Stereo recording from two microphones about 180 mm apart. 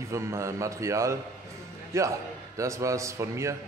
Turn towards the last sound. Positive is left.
turn(degrees=-15)  # may be behind; listen again after turning